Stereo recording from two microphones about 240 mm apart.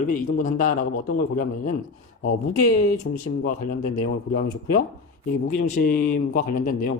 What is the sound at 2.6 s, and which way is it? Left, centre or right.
Speech, left.